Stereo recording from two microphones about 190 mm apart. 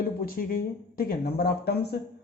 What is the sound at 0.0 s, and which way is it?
A man's voice, 50° left (ahead or behind).